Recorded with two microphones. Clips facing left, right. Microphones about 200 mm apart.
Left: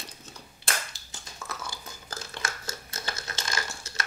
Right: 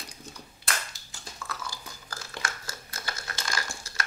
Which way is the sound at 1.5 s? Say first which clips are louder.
Even; 20° left (ahead or behind).